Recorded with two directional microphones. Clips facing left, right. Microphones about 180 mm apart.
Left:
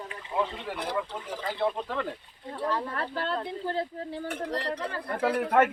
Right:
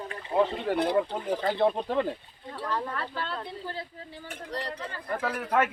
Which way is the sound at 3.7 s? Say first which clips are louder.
Left 7 dB; 60° left (ahead or behind).